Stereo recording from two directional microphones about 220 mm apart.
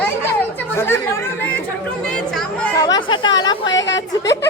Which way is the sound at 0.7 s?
10° left (ahead or behind).